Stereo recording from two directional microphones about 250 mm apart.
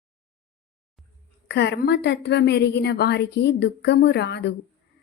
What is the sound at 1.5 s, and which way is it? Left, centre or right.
A woman's voice, left.